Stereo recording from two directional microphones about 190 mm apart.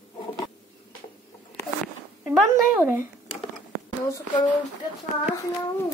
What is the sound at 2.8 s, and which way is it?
Speech, 10° right (ahead or behind).